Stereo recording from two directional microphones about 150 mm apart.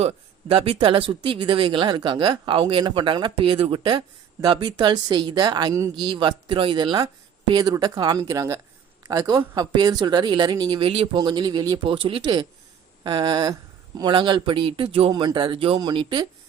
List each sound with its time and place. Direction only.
0.0 s speech: 40° right (ahead or behind)
11.2 s speech: 30° right (ahead or behind)
11.9 s speech: 35° right (ahead or behind)